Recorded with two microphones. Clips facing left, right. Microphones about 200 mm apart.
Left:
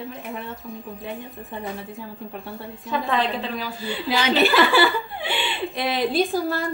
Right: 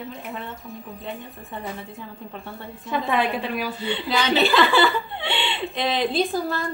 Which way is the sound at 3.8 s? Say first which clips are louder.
Left 2 dB; 5° left (ahead or behind).